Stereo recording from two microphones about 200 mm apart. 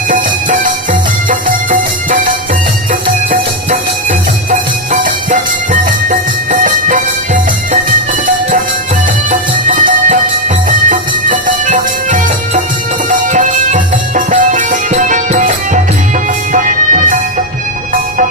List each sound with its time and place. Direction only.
0.1 s music: 40° right (ahead or behind)
4.9 s music: 40° right (ahead or behind)
9.3 s music: 40° right (ahead or behind)